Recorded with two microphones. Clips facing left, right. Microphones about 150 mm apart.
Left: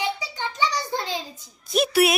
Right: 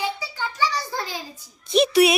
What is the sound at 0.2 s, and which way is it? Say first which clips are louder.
Child singing: right 1 dB; 20° left (ahead or behind).